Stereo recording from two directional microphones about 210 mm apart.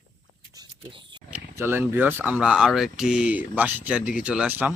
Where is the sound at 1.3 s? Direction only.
10° right (ahead or behind).